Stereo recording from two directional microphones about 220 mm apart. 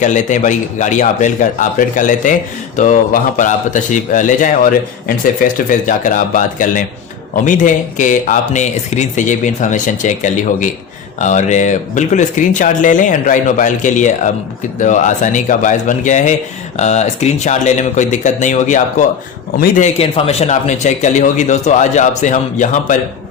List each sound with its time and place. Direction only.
0.0 s speech: 35° left (ahead or behind)